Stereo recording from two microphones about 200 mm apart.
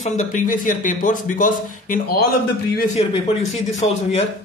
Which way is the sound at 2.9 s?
30° left (ahead or behind).